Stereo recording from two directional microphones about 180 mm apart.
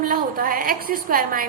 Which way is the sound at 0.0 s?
50° right (ahead or behind).